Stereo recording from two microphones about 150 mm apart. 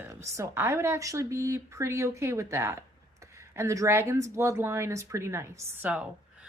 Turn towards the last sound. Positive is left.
turn(degrees=-10)  # may be behind; listen again after turning